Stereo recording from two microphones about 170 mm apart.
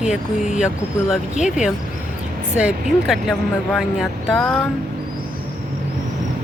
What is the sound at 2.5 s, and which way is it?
Speech, 5° right (ahead or behind).